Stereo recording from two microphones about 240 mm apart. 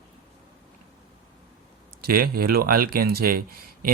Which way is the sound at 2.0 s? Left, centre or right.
Right.